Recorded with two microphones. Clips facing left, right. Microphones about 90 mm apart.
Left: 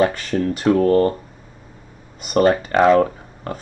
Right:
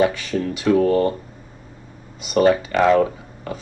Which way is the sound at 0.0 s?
45° left (ahead or behind).